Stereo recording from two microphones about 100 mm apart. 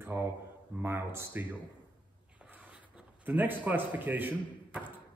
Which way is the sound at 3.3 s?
20° right (ahead or behind).